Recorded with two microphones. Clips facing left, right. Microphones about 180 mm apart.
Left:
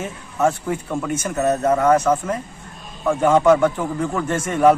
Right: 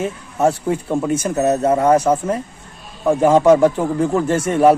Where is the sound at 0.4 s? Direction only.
30° right (ahead or behind).